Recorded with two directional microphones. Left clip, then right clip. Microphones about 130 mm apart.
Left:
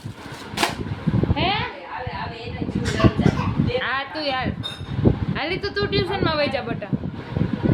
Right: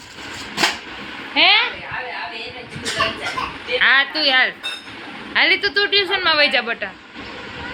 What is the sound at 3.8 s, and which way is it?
A woman's voice, 10° right (ahead or behind).